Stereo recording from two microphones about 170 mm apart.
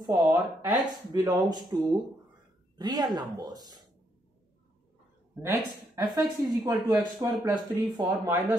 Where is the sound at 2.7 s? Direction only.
25° right (ahead or behind).